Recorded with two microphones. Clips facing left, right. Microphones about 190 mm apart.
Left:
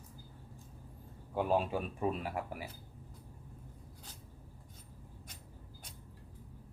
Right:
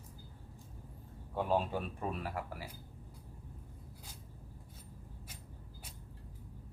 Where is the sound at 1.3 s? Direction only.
5° left (ahead or behind).